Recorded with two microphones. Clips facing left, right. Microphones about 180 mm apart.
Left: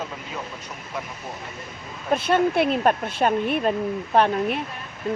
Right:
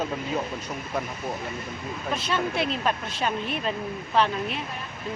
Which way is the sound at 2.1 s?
55° left (ahead or behind).